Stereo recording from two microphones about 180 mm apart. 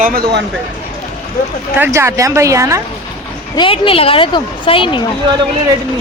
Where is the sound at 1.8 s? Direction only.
15° right (ahead or behind).